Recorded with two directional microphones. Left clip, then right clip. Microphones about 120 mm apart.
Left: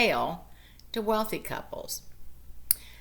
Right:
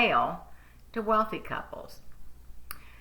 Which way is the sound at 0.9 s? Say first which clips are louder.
Right 2 dB; 35° left (ahead or behind).